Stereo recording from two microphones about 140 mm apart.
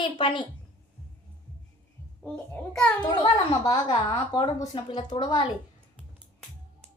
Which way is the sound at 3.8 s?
35° left (ahead or behind).